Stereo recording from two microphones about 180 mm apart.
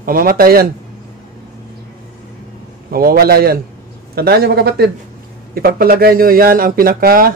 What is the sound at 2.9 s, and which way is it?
Speech, 55° right (ahead or behind).